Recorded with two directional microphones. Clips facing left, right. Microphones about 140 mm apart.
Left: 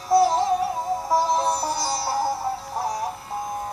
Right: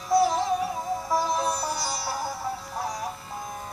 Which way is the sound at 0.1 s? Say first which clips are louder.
Left 4 dB; 35° left (ahead or behind).